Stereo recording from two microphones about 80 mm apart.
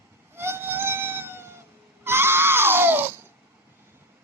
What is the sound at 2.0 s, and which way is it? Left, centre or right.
Crying, right.